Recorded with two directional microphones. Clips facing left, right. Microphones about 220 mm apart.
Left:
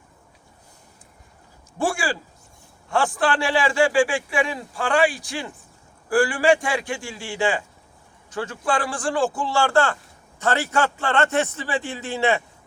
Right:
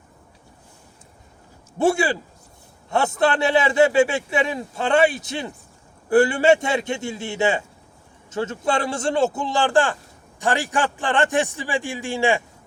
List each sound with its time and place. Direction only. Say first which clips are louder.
1.8 s a man's voice: right 5 dB; 20° right (ahead or behind)